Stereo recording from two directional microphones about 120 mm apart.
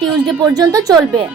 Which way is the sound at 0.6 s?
35° right (ahead or behind).